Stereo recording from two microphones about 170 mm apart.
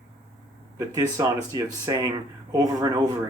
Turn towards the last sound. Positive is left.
turn(degrees=-20)  # may be behind; listen again after turning